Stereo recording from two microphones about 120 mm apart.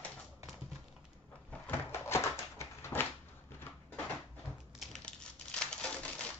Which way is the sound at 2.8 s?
20° left (ahead or behind).